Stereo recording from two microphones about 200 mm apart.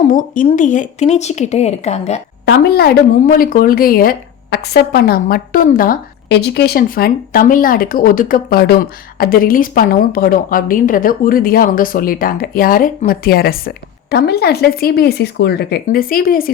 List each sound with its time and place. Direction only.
0.1 s speech: 40° left (ahead or behind)
2.5 s speech: 50° left (ahead or behind)